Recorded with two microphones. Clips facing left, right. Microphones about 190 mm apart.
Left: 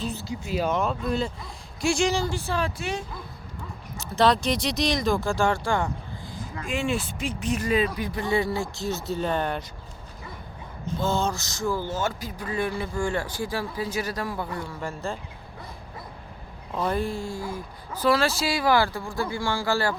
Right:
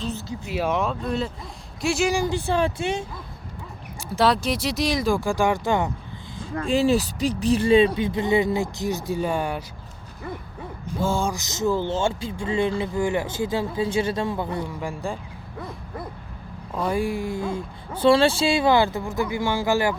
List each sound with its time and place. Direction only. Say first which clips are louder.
0.0 s speech: right 1 dB; 10° left (ahead or behind)
0.5 s speech: right 1 dB; 5° right (ahead or behind); by 3.1 s 25° right (ahead or behind)
4.1 s speech: even; 5° right (ahead or behind)
6.6 s speech: right 8 dB; 35° right (ahead or behind); by 9.6 s 10° right (ahead or behind)
11.0 s speech: right 2 dB; 10° right (ahead or behind)
16.9 s speech: right 3 dB; 15° right (ahead or behind)